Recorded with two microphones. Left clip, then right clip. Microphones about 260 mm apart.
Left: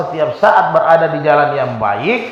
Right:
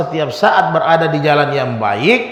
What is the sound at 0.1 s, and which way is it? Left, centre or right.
A man's voice, right.